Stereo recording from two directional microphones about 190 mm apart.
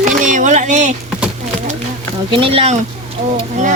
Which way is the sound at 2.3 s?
30° right (ahead or behind).